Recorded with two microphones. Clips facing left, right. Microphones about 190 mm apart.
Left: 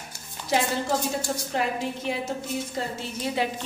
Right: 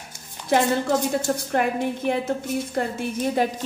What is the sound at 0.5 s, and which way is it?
A woman's voice, 60° right (ahead or behind).